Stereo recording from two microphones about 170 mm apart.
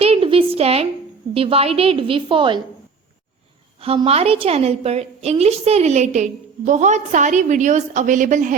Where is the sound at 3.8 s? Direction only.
35° right (ahead or behind).